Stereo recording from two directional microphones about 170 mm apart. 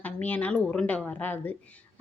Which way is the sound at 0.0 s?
10° left (ahead or behind).